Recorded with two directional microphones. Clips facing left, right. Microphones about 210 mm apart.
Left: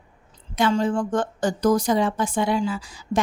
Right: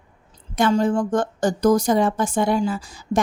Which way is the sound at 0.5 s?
45° right (ahead or behind).